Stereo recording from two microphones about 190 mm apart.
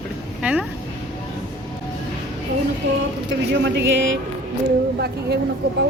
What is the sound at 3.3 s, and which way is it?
Speech, 75° right (ahead or behind).